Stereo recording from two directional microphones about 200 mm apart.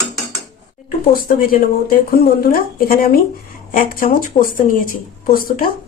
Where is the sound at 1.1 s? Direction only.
45° left (ahead or behind).